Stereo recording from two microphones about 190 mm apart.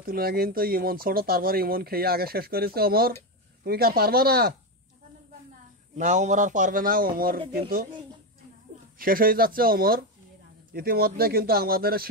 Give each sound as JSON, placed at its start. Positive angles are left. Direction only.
{"t": 0.0, "sound": "speech", "side_deg": -50}
{"t": 5.9, "sound": "speech", "side_deg": -40}
{"t": 8.9, "sound": "speech", "side_deg": -50}